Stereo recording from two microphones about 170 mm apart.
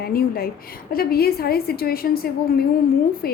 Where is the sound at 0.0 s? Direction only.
60° left (ahead or behind).